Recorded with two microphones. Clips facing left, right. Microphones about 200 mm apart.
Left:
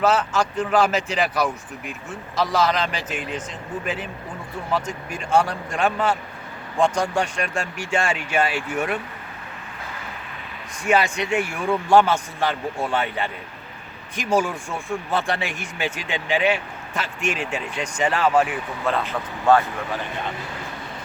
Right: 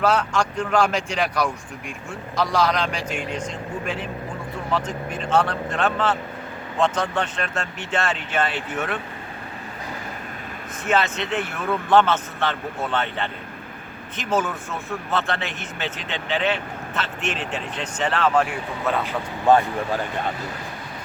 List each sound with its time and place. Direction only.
0.0 s speech: 5° left (ahead or behind)
10.8 s speech: 10° left (ahead or behind)
19.5 s speech: 15° right (ahead or behind)